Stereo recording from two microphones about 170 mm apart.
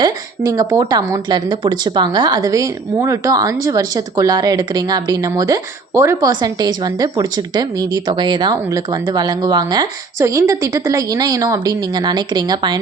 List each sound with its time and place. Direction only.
0.0 s a woman's voice: 20° right (ahead or behind)